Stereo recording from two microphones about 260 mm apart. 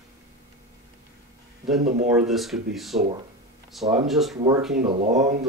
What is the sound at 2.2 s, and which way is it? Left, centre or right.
Speech, centre.